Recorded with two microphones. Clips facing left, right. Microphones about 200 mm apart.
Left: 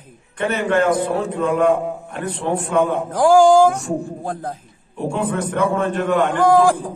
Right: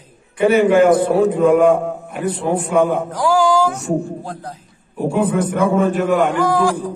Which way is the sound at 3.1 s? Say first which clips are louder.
Left 4 dB; 50° left (ahead or behind).